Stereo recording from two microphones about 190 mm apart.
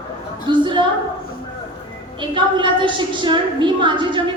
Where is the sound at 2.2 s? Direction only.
25° right (ahead or behind).